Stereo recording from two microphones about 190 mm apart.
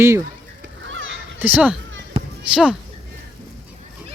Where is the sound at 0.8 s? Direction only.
80° right.